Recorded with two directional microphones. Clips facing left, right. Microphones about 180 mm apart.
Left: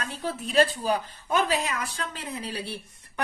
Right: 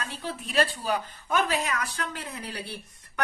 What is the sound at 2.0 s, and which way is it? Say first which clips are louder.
Speech: left 1 dB; 20° left (ahead or behind).